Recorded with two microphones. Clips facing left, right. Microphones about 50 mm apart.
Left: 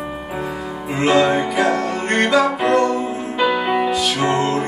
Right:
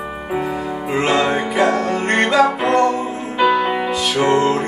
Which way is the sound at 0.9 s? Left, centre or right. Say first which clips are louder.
Left 2 dB; centre.